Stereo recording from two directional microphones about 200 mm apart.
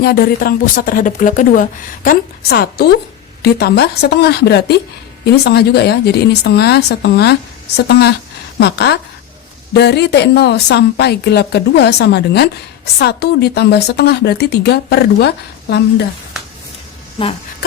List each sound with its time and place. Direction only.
0.0 s speech: 50° left (ahead or behind)
2.0 s a woman's voice: 50° left (ahead or behind)